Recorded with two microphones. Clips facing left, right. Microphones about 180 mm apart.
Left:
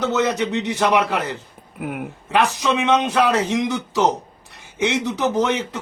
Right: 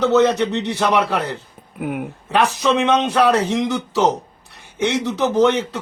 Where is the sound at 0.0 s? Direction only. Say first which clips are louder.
Right 5 dB; 15° left (ahead or behind).